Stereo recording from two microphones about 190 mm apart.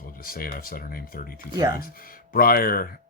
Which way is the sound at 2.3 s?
50° left (ahead or behind).